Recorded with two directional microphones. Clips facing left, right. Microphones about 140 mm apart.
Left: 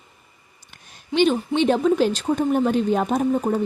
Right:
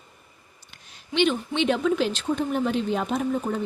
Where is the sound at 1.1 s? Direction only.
40° left (ahead or behind).